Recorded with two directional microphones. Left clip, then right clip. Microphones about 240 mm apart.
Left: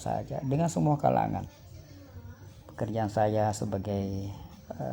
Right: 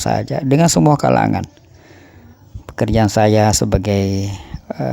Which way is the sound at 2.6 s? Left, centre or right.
Right.